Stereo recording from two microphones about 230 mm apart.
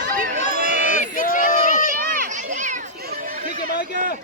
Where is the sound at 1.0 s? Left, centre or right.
Left.